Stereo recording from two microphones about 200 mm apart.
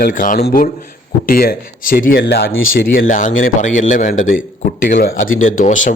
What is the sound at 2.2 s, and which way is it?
Speech, 55° left (ahead or behind).